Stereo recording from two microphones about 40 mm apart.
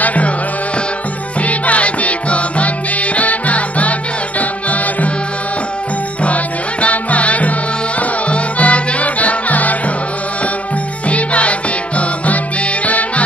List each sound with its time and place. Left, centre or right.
0.0 s music: left
1.4 s music: left
6.2 s music: left
11.1 s music: left
12.8 s music: left